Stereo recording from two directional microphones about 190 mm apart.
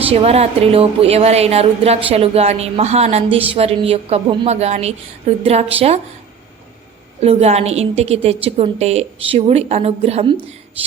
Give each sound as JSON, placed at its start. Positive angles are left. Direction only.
{"t": 0.0, "sound": "a woman's voice", "side_deg": -30}
{"t": 7.2, "sound": "a woman's voice", "side_deg": -35}